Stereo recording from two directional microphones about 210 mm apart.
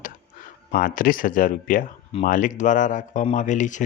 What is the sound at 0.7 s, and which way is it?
Speech, 40° left (ahead or behind).